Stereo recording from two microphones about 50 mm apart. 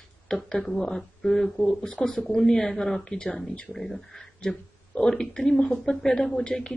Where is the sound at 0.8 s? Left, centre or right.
Centre.